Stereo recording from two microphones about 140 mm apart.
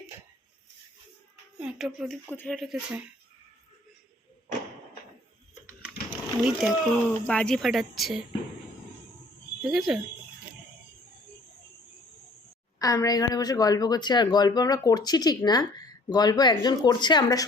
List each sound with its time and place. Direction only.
1.5 s speech: 5° right (ahead or behind)
2.2 s speech: 15° left (ahead or behind)
2.5 s speech: centre (ahead or behind)
6.4 s speech: 5° right (ahead or behind)
9.6 s speech: centre (ahead or behind)
12.8 s speech: 25° left (ahead or behind)